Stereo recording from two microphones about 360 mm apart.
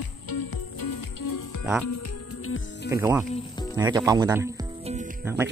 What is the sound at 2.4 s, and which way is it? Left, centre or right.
Music, left.